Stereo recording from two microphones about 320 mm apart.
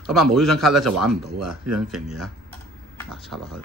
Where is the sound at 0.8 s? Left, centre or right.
Right.